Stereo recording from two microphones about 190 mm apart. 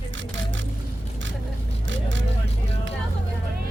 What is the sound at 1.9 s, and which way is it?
Vehicle, 75° right (ahead or behind).